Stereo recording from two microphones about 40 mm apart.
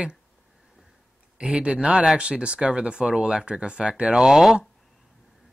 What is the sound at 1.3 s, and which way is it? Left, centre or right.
Speech, right.